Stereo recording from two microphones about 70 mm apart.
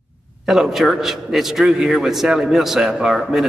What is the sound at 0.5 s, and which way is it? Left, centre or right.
A man's voice, centre.